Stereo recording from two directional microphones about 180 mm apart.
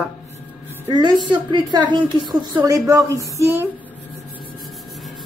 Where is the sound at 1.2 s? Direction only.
25° right (ahead or behind).